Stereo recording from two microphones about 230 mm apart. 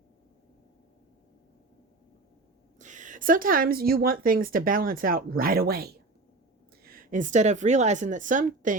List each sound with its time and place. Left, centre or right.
2.7 s speech: right